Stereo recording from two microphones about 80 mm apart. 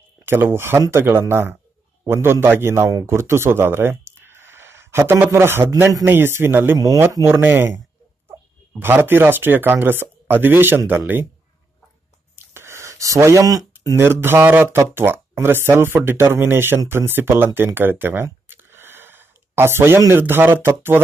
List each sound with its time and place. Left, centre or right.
0.2 s a man's voice: right
7.4 s speech: right
12.4 s a sound: right
13.9 s speech: right
17.7 s a sound: right
20.1 s speech: right